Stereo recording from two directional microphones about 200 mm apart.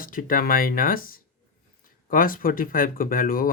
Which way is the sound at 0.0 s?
45° left (ahead or behind).